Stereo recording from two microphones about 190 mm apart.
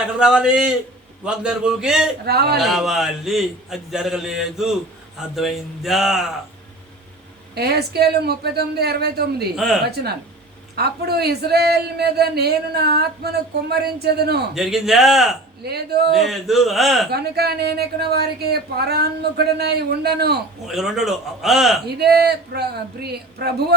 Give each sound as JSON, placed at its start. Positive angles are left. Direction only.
{"t": 0.2, "sound": "a man's voice", "side_deg": -5}
{"t": 2.2, "sound": "a man's voice", "side_deg": -55}
{"t": 2.6, "sound": "a man's voice", "side_deg": 0}
{"t": 7.5, "sound": "a man's voice", "side_deg": -55}
{"t": 9.6, "sound": "a man's voice", "side_deg": 0}
{"t": 9.9, "sound": "a man's voice", "side_deg": -55}
{"t": 14.5, "sound": "a man's voice", "side_deg": 0}
{"t": 15.6, "sound": "a man's voice", "side_deg": -55}
{"t": 16.1, "sound": "a man's voice", "side_deg": 0}
{"t": 17.1, "sound": "a man's voice", "side_deg": -55}
{"t": 20.7, "sound": "a man's voice", "side_deg": 0}
{"t": 21.8, "sound": "a man's voice", "side_deg": -55}